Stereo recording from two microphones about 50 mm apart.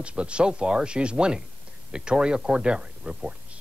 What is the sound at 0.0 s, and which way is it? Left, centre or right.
Speech, right.